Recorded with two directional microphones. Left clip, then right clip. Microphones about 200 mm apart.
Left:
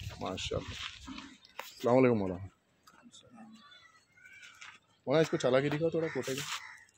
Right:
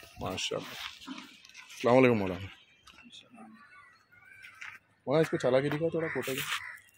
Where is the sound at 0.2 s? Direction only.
Centre (ahead or behind).